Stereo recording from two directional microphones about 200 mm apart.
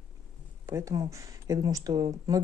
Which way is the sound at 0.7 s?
15° right (ahead or behind).